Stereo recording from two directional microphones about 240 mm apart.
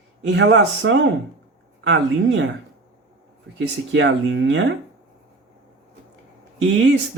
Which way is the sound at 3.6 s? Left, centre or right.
Right.